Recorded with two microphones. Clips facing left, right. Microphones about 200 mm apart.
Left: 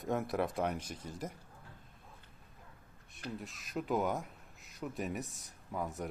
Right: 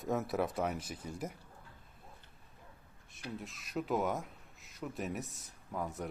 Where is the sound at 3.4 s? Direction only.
Centre (ahead or behind).